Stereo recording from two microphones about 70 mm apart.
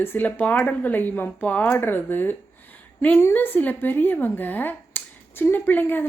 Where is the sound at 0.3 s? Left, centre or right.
Centre.